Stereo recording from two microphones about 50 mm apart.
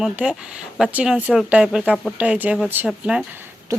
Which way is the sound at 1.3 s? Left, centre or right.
Centre.